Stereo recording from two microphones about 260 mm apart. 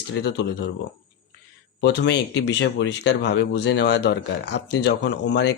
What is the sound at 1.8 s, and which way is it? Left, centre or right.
Speech, left.